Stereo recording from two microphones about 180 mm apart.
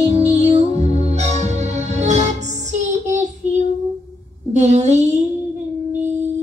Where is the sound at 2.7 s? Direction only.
40° right (ahead or behind).